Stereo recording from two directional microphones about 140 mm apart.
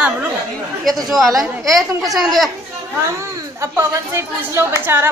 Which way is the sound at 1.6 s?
Centre (ahead or behind).